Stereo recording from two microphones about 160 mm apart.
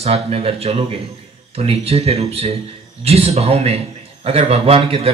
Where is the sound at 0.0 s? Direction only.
40° right (ahead or behind).